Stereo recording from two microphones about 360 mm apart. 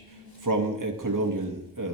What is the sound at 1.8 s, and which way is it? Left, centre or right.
Speech, right.